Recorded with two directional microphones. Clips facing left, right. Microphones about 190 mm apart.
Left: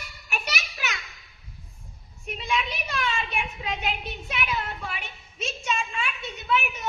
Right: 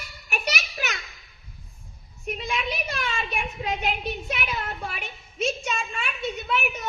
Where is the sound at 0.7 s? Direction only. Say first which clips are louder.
Right 2 dB; 45° right (ahead or behind).